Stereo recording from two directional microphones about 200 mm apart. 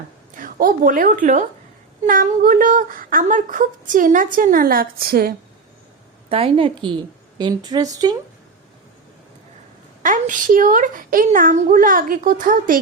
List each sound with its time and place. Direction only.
0.3 s a woman's voice: 45° right (ahead or behind)
6.2 s speech: 25° right (ahead or behind)
10.0 s speech: 40° right (ahead or behind)